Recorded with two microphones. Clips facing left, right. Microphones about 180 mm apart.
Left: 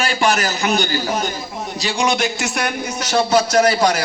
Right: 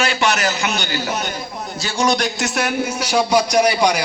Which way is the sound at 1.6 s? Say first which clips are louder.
Even; 10° left (ahead or behind).